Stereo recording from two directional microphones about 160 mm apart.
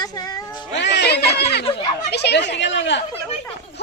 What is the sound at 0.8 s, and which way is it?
Speech, 90° left.